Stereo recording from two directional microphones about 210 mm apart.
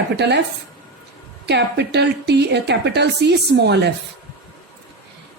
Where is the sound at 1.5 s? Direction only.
55° right (ahead or behind).